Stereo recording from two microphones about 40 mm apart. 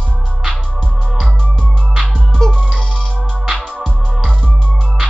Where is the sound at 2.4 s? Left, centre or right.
Centre.